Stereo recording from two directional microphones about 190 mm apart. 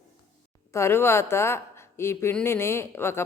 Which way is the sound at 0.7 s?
15° left (ahead or behind).